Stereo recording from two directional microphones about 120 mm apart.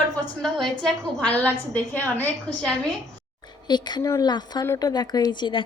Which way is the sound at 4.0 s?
25° left (ahead or behind).